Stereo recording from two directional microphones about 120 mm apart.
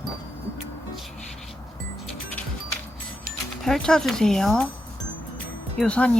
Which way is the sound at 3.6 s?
5° left (ahead or behind).